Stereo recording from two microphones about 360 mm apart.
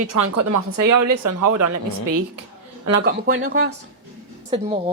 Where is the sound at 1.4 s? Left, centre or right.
Right.